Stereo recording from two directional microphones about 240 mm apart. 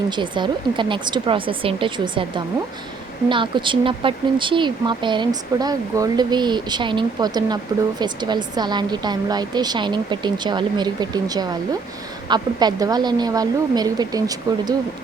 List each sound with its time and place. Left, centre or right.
0.1 s speech: centre